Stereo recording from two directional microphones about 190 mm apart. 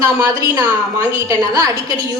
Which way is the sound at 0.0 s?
20° right (ahead or behind).